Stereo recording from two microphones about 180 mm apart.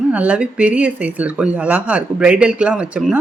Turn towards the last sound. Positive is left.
turn(degrees=-5)  # may be behind; listen again after turning